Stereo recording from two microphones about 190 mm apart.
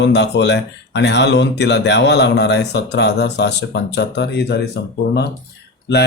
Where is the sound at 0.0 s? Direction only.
65° left (ahead or behind).